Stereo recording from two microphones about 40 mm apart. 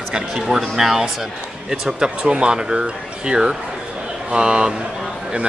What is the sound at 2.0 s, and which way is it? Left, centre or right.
Speech, right.